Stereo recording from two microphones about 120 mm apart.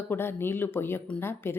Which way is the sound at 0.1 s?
20° left (ahead or behind).